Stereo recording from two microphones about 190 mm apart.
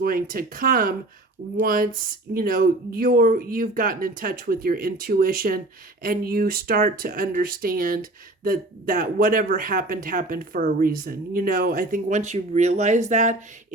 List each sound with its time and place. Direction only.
0.0 s speech: 50° right (ahead or behind)